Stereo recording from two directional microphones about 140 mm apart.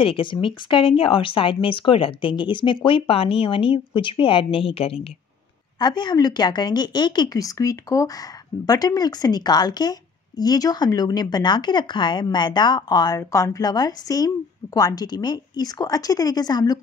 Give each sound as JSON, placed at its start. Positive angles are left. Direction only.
{"t": 0.0, "sound": "speech", "side_deg": 40}
{"t": 5.8, "sound": "a woman's voice", "side_deg": 30}